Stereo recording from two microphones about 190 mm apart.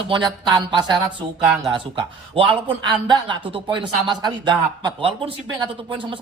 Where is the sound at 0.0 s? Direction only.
25° right (ahead or behind).